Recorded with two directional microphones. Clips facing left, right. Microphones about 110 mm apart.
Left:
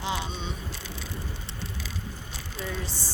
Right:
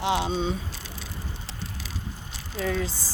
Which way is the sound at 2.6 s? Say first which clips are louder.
Right 7 dB; 90° right.